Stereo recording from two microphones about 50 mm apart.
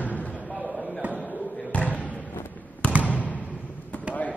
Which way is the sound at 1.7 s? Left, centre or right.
Left.